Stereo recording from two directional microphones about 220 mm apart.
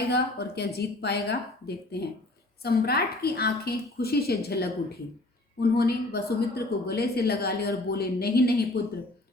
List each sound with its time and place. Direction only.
0.1 s a woman's voice: 45° left (ahead or behind)